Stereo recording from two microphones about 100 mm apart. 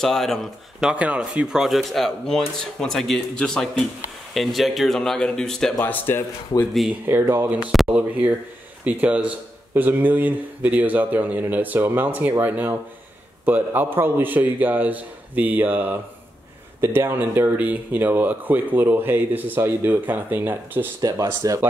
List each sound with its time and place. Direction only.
0.0 s speech: 5° left (ahead or behind)
0.9 s speech: 15° right (ahead or behind); by 5.8 s 5° left (ahead or behind)
5.9 s speech: 20° left (ahead or behind)
7.1 s a man's voice: 20° right (ahead or behind)
21.0 s speech: 40° right (ahead or behind)